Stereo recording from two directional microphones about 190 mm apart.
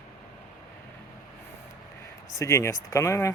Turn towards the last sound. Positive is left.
turn(degrees=15)  # may be behind; listen again after turning